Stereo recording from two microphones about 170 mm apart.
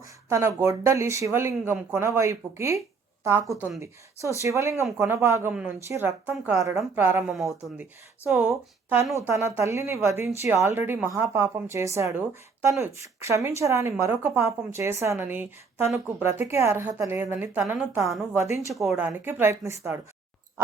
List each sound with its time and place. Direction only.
0.0 s a woman's voice: 15° right (ahead or behind)
7.3 s a woman's voice: centre (ahead or behind)
8.2 s a woman's voice: 15° right (ahead or behind)
18.7 s a woman's voice: centre (ahead or behind); by 20.0 s 15° right (ahead or behind)